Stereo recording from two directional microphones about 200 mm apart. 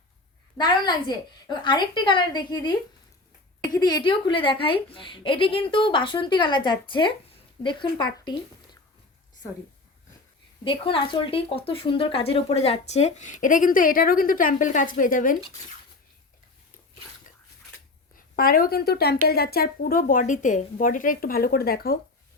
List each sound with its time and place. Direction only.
0.5 s a woman's voice: 20° left (ahead or behind)
10.6 s a woman's voice: 25° left (ahead or behind); by 15.4 s 40° left (ahead or behind)
18.3 s speech: 45° left (ahead or behind)